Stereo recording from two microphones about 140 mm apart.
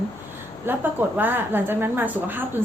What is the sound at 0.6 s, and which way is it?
A woman's voice, 15° right (ahead or behind).